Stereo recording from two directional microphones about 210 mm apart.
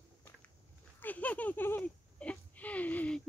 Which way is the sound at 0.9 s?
10° left (ahead or behind).